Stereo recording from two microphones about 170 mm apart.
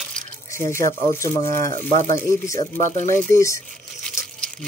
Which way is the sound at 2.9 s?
50° right (ahead or behind).